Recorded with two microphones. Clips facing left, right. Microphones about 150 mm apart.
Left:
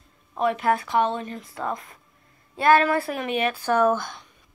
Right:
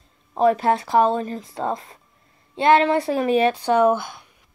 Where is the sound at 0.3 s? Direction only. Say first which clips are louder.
Right 5 dB; 35° right (ahead or behind).